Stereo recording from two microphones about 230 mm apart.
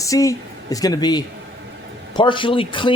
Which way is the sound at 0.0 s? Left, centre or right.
Centre.